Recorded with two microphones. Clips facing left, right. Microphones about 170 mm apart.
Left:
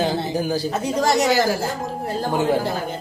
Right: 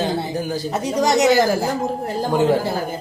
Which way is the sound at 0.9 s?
15° right (ahead or behind).